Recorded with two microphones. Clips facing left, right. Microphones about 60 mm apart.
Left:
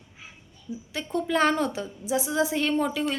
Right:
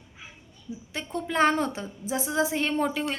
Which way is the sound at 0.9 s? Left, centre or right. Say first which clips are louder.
Left 1 dB; right.